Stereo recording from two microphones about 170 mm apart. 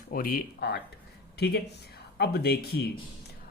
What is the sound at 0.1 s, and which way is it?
A man's voice, 60° left (ahead or behind).